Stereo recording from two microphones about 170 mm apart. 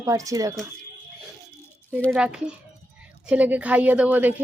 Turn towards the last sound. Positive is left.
turn(degrees=-10)  # may be behind; listen again after turning